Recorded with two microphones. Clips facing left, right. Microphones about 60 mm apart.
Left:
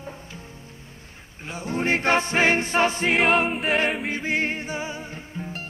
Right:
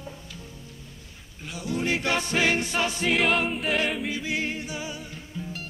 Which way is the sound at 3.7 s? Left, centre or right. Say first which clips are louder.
Left 3 dB; left.